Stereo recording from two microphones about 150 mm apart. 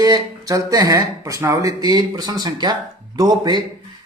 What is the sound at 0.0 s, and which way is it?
Speech, 25° right (ahead or behind).